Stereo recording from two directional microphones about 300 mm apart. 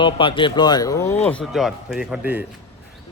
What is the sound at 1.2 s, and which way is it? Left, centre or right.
Speech, centre.